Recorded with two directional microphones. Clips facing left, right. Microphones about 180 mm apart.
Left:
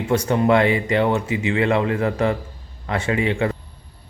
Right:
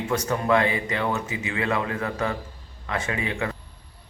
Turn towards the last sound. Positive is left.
turn(degrees=30)  # may be behind; listen again after turning